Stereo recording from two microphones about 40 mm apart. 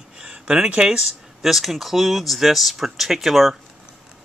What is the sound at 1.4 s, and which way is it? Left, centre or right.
Speech, centre.